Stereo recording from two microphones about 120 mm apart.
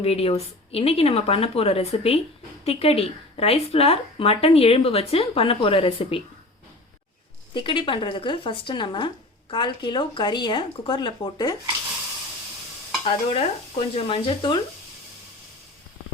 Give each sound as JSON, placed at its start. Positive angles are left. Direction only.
{"t": 0.0, "sound": "a woman's voice", "side_deg": 55}
{"t": 7.5, "sound": "speech", "side_deg": 45}
{"t": 13.1, "sound": "speech", "side_deg": 55}